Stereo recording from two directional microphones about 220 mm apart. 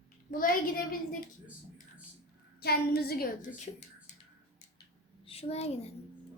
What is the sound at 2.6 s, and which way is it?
Speech, 45° left (ahead or behind).